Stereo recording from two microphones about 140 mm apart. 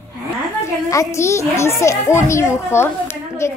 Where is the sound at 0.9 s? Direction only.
20° left (ahead or behind).